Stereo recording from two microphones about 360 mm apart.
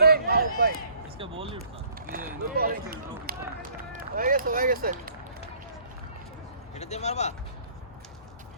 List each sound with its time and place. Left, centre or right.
0.0 s a sound: right
1.2 s speech: centre
6.7 s speech: centre